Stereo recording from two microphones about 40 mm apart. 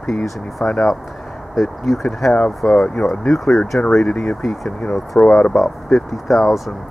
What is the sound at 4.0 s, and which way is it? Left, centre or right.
Speech, left.